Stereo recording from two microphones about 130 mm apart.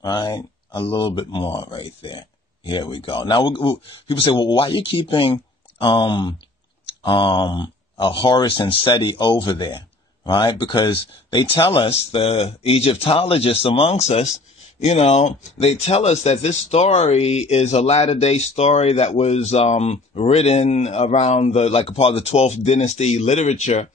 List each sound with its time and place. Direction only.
0.0 s speech: 35° left (ahead or behind); by 23.9 s 55° left (ahead or behind)